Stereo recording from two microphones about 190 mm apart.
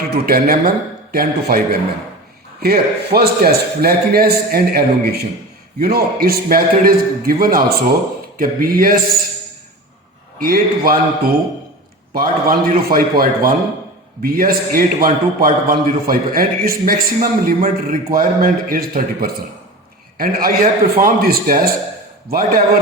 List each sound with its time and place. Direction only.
0.1 s a man's voice: 50° right (ahead or behind)
10.4 s a man's voice: 50° right (ahead or behind)